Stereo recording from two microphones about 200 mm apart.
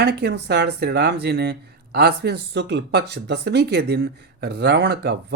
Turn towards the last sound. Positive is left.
turn(degrees=-55)  # may be behind; listen again after turning